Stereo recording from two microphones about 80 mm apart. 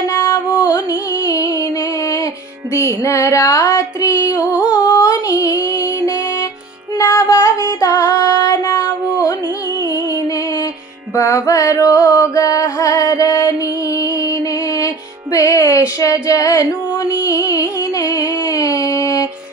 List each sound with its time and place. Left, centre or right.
0.1 s music: left
0.7 s music: left
11.1 s music: left